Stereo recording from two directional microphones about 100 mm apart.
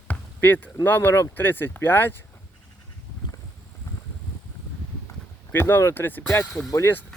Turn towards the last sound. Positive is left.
turn(degrees=25)  # may be behind; listen again after turning